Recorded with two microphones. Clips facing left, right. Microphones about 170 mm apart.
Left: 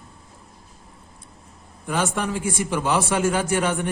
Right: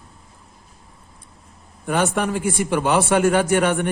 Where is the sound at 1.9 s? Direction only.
60° right (ahead or behind).